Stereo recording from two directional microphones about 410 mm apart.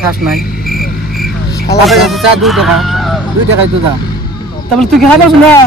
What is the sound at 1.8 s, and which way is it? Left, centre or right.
Speech, centre.